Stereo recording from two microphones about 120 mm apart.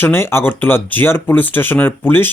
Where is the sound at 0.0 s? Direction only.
20° left (ahead or behind).